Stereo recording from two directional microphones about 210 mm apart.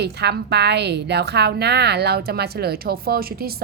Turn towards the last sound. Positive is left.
turn(degrees=-45)  # may be behind; listen again after turning